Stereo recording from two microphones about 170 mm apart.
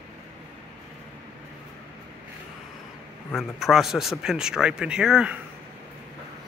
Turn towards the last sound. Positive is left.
turn(degrees=-5)  # may be behind; listen again after turning